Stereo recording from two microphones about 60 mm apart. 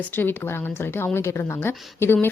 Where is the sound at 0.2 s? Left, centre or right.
Left.